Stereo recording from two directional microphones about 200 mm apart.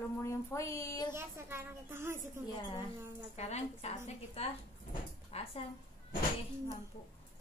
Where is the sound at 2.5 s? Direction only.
20° left (ahead or behind).